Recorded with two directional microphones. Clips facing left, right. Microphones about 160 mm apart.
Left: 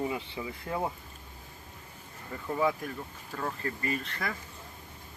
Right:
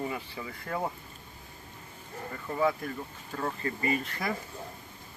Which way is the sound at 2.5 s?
10° left (ahead or behind).